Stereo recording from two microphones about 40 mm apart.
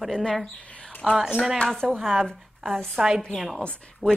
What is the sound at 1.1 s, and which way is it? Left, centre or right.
Speech, centre.